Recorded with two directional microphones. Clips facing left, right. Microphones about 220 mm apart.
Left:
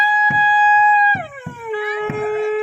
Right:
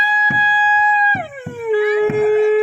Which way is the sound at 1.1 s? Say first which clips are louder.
Right 4 dB; 15° right (ahead or behind).